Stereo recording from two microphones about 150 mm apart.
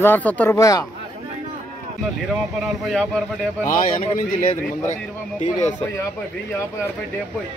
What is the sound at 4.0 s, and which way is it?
Speech, 45° left (ahead or behind).